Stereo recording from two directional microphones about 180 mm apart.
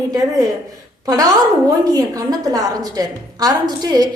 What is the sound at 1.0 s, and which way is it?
A woman's voice, 20° right (ahead or behind).